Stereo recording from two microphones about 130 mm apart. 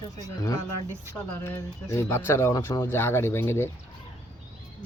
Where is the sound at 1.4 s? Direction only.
20° left (ahead or behind).